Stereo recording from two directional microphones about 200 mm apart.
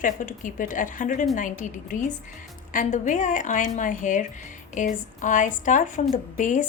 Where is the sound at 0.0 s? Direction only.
40° left (ahead or behind).